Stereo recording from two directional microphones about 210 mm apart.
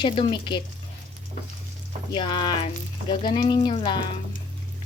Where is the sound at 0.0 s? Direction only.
20° left (ahead or behind).